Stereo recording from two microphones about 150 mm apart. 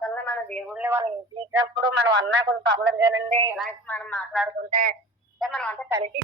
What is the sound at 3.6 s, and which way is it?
Speech, 10° left (ahead or behind).